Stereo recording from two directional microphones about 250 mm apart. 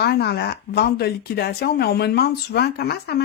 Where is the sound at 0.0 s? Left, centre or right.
Left.